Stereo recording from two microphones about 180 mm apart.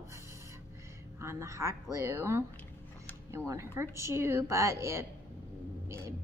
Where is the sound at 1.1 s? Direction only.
15° right (ahead or behind).